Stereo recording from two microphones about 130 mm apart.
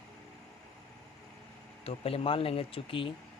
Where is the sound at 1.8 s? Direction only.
45° left (ahead or behind).